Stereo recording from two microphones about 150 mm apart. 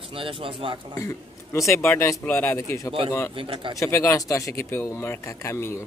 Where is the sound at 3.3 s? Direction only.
35° right (ahead or behind).